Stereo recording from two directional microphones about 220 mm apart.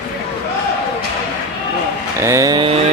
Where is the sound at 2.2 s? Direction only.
15° right (ahead or behind).